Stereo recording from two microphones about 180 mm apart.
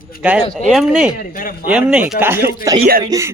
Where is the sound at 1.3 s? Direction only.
50° left (ahead or behind).